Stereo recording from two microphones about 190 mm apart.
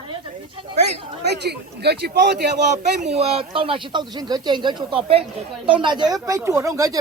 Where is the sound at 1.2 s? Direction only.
60° right (ahead or behind).